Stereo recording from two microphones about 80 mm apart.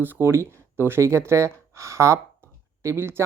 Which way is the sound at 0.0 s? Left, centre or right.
Right.